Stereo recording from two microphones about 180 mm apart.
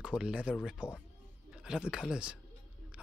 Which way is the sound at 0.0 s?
5° right (ahead or behind).